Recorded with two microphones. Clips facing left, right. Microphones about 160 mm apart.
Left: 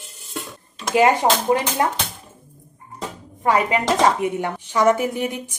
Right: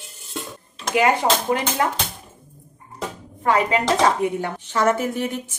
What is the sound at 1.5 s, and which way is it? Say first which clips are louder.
Speech: left 3 dB; 25° left (ahead or behind).